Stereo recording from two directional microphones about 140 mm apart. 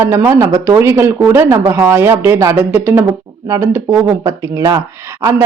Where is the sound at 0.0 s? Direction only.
20° right (ahead or behind).